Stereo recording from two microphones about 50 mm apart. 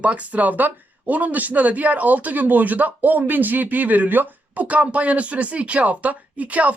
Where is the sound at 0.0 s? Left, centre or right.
Right.